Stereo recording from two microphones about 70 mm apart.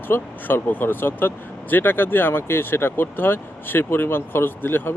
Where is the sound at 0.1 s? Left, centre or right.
Left.